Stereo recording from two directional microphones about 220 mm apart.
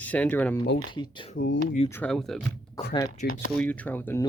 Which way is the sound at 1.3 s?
50° left (ahead or behind).